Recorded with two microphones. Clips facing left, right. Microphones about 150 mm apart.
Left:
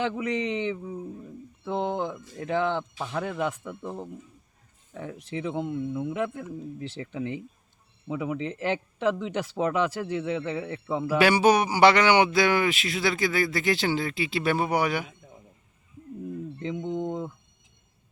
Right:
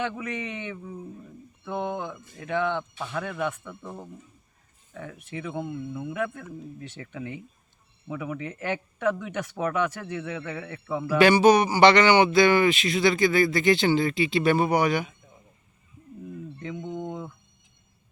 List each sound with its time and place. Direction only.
0.0 s speech: 30° left (ahead or behind)
11.2 s speech: 10° left (ahead or behind)
16.8 s a sound: 30° left (ahead or behind)